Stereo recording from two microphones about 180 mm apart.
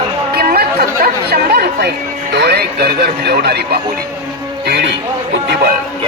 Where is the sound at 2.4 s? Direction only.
65° right (ahead or behind).